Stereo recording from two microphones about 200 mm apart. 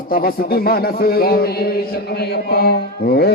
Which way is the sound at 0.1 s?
45° left (ahead or behind).